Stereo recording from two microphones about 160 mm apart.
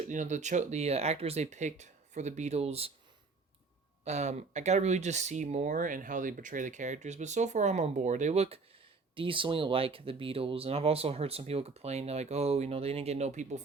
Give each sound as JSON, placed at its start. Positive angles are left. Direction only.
{"t": 0.1, "sound": "speech", "side_deg": -50}
{"t": 4.0, "sound": "speech", "side_deg": -45}